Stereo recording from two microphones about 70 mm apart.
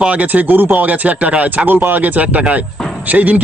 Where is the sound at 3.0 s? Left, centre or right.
Right.